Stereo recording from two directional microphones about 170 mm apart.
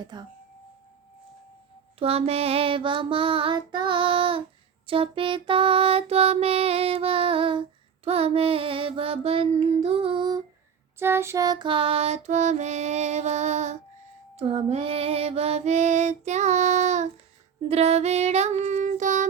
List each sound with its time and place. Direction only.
0.0 s speech: 25° right (ahead or behind)
2.0 s music: 35° right (ahead or behind)
10.9 s music: 15° right (ahead or behind); by 17.1 s 45° right (ahead or behind)
17.7 s child singing: 40° right (ahead or behind)